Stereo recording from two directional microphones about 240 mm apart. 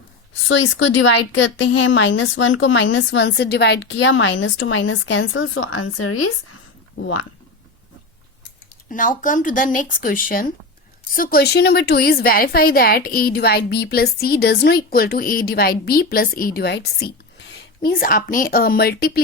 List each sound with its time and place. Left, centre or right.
0.4 s speech: left
8.9 s a woman's voice: left